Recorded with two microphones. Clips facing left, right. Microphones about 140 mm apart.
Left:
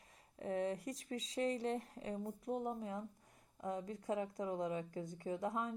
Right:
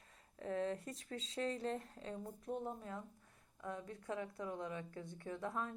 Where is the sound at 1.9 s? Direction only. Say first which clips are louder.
Left 3 dB; 15° left (ahead or behind).